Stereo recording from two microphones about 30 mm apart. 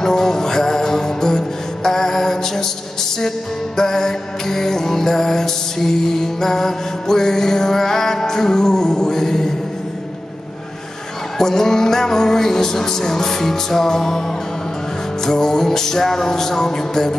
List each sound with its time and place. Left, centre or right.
0.0 s music: centre
11.3 s music: centre
15.2 s music: centre